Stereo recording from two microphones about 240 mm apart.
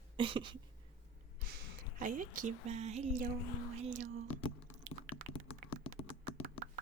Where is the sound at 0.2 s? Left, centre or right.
Right.